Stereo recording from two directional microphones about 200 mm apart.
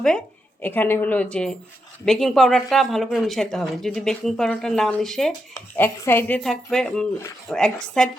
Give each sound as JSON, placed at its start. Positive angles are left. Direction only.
{"t": 0.6, "sound": "speech", "side_deg": 10}